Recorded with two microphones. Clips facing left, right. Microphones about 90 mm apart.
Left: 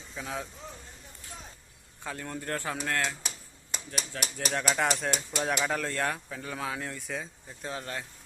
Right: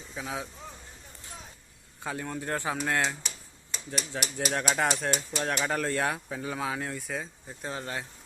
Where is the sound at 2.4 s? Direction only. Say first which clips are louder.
Right 2 dB; 15° right (ahead or behind).